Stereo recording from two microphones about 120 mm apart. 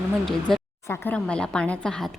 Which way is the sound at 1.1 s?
10° left (ahead or behind).